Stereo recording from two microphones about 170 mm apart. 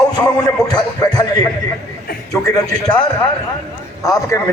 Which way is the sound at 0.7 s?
25° left (ahead or behind).